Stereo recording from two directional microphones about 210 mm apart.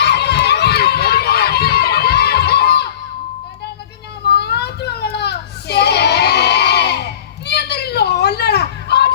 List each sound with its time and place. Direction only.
0.0 s run: 55° left (ahead or behind)
4.3 s children playing: 50° left (ahead or behind)